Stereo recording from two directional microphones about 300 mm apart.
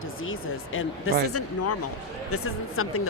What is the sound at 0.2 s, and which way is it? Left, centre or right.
Speech, left.